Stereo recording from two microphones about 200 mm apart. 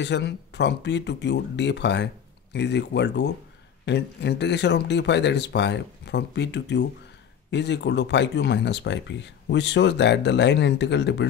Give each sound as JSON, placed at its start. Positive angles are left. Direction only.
{"t": 0.0, "sound": "speech", "side_deg": 60}